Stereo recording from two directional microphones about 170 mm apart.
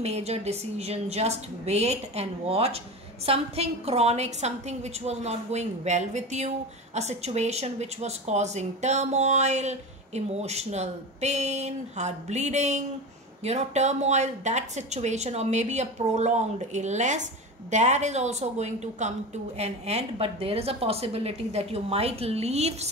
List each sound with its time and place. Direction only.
0.0 s a woman's voice: 40° right (ahead or behind)